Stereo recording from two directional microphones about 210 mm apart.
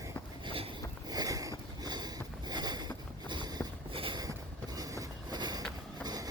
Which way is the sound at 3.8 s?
25° right (ahead or behind).